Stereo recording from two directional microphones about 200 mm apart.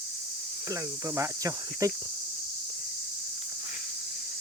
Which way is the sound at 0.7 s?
15° right (ahead or behind).